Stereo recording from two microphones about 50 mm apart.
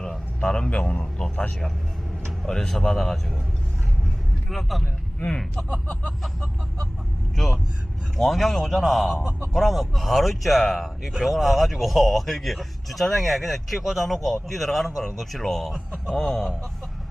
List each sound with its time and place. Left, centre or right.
0.4 s a man's voice: centre
2.5 s a man's voice: centre
4.0 s vehicle: centre
5.7 s a man's voice: left
8.2 s speech: centre
15.7 s speech: centre
16.1 s speech: centre